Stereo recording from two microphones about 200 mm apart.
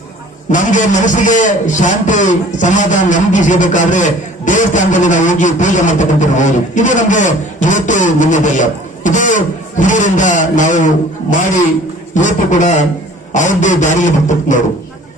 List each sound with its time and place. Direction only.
0.5 s a man's voice: 40° left (ahead or behind)
12.1 s a man's voice: 40° left (ahead or behind)